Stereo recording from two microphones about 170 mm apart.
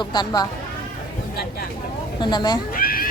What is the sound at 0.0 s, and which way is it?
Music, 25° left (ahead or behind).